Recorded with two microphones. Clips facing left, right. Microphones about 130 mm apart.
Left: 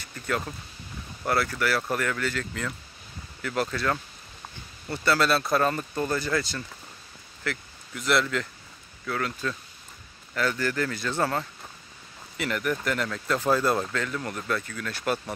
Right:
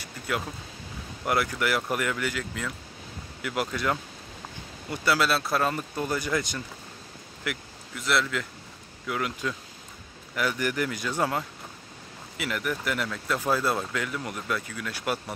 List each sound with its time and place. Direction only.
1.2 s speech: 15° right (ahead or behind)
7.9 s speech: centre (ahead or behind)
9.0 s speech: 15° right (ahead or behind)